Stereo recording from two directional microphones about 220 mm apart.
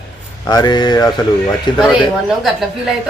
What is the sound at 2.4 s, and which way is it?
Speech, centre (ahead or behind).